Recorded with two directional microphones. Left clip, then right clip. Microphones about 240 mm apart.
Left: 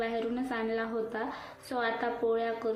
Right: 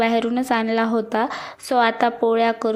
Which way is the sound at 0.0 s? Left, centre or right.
Right.